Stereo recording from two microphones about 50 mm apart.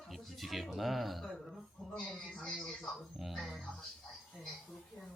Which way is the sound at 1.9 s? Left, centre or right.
Centre.